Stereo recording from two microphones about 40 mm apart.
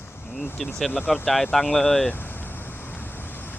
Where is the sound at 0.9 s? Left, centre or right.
Left.